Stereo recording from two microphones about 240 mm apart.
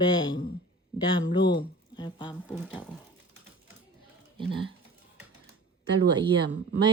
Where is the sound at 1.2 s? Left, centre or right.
Centre.